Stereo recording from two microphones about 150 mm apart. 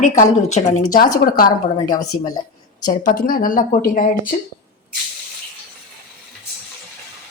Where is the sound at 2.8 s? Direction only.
60° left (ahead or behind).